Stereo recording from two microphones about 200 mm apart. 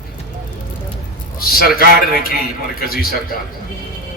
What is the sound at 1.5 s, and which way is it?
A man's voice, 45° left (ahead or behind).